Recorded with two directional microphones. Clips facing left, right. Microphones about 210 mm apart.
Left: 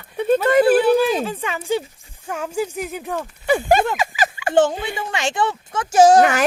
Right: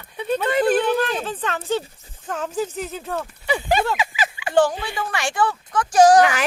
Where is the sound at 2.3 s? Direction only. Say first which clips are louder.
Left 1 dB; 10° left (ahead or behind).